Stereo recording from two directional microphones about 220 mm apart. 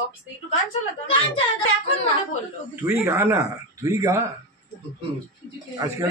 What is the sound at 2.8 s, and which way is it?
Speech, 10° right (ahead or behind).